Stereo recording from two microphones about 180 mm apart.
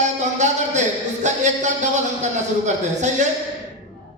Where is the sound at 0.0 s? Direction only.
40° right (ahead or behind).